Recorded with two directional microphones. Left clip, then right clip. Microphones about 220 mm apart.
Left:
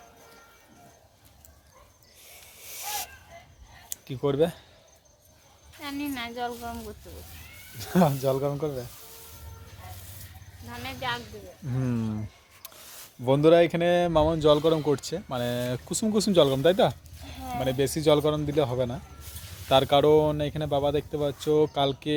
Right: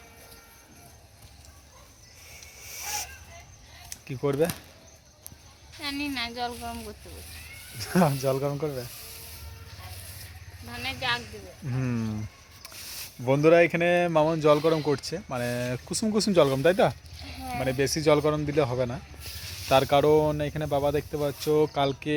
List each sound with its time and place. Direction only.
2.6 s a sound: 5° left (ahead or behind)
3.8 s speech: 5° left (ahead or behind)
5.7 s speech: 5° left (ahead or behind)
10.8 s speech: 15° right (ahead or behind)
11.7 s speech: 5° left (ahead or behind)
13.2 s speech: 5° left (ahead or behind)